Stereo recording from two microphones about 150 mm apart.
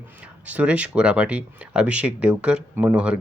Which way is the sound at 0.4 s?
10° right (ahead or behind).